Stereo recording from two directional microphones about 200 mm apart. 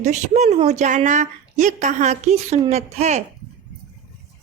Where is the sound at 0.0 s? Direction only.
35° right (ahead or behind).